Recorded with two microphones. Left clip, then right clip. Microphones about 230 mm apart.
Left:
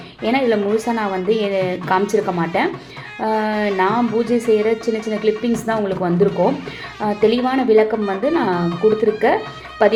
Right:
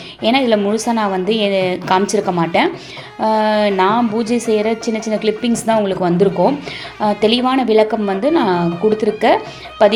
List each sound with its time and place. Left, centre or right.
0.2 s a woman's voice: right